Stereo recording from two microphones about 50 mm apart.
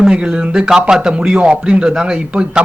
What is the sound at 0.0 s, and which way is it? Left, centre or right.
A man's voice, centre.